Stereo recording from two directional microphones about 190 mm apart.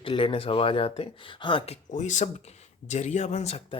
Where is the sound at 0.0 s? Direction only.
30° left (ahead or behind).